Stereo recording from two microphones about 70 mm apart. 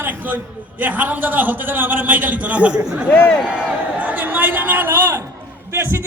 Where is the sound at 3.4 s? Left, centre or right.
Centre.